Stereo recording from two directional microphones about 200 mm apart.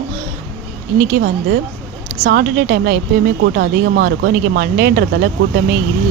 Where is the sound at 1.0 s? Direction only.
50° right (ahead or behind).